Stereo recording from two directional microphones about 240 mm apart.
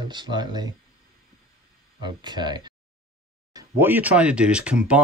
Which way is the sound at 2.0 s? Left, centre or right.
Centre.